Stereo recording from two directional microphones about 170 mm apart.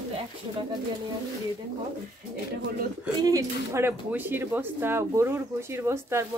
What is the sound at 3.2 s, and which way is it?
Speech, 20° right (ahead or behind).